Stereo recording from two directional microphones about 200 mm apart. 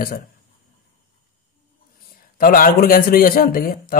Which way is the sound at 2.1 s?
45° left (ahead or behind).